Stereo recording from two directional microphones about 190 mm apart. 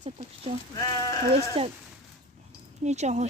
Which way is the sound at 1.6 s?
30° right (ahead or behind).